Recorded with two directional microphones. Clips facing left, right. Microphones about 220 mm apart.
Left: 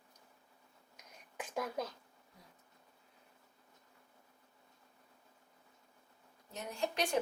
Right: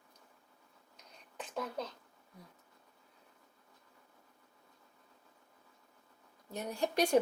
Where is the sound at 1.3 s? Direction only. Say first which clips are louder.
Left 1 dB; 10° left (ahead or behind).